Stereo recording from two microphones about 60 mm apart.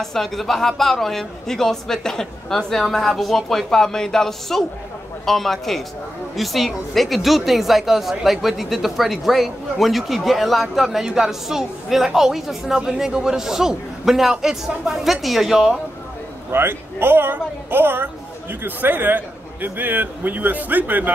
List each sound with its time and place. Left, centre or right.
0.0 s a woman's voice: centre
16.4 s a woman's voice: right